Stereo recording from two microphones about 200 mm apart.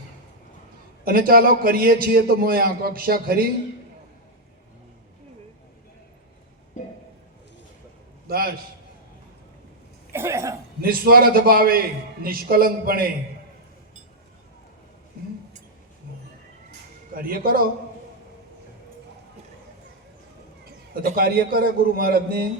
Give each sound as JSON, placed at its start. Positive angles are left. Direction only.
{"t": 1.0, "sound": "a man's voice", "side_deg": -50}
{"t": 10.1, "sound": "speech", "side_deg": -15}
{"t": 10.8, "sound": "a man's voice", "side_deg": -50}
{"t": 17.2, "sound": "a man's voice", "side_deg": -45}
{"t": 20.9, "sound": "a man's voice", "side_deg": -50}